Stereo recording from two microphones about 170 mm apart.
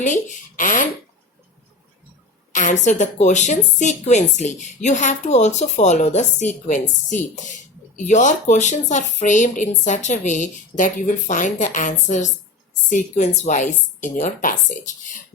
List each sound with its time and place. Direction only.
0.0 s speech: 50° left (ahead or behind)
2.5 s a woman's voice: 45° left (ahead or behind)